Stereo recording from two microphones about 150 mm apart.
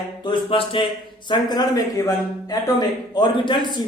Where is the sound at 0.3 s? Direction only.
35° left (ahead or behind).